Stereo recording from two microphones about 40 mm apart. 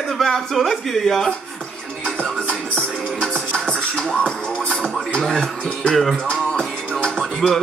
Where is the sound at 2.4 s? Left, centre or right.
Centre.